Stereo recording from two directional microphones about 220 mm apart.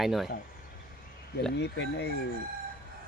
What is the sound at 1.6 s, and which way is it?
Speech, 50° left (ahead or behind).